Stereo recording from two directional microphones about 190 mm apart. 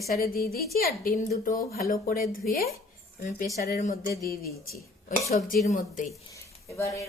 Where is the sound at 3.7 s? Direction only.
45° left (ahead or behind).